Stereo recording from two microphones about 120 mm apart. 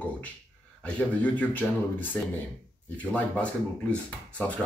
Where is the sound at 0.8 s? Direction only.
15° left (ahead or behind).